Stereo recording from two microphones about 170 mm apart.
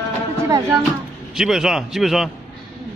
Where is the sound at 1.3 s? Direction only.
Centre (ahead or behind).